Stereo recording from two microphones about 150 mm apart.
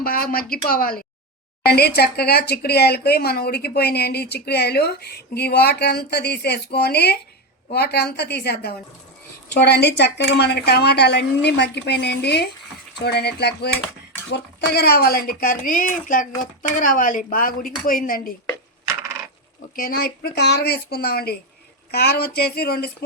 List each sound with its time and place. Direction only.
0.0 s a woman's voice: 80° left
19.7 s speech: 80° left